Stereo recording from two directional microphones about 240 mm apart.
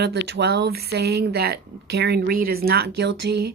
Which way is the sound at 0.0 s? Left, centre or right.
Right.